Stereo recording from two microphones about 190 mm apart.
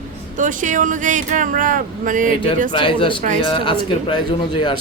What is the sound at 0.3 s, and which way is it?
Speech, 40° right (ahead or behind).